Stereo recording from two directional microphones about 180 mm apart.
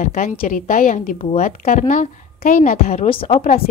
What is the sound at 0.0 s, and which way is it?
Speech, 50° left (ahead or behind).